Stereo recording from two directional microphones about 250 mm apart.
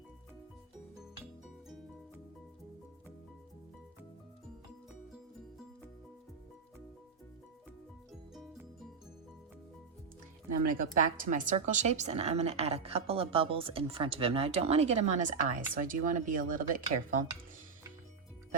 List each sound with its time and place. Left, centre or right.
10.6 s a woman's voice: right